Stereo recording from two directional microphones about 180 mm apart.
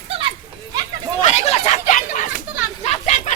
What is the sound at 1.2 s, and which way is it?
Chatter, 35° left (ahead or behind).